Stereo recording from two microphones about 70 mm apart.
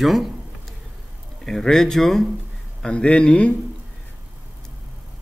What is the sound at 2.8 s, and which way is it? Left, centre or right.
Speech, centre.